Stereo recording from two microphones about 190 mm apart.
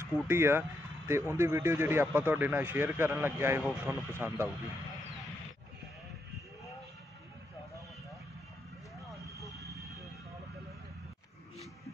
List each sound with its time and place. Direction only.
0.3 s speech: 10° right (ahead or behind)
9.6 s vehicle: 15° right (ahead or behind)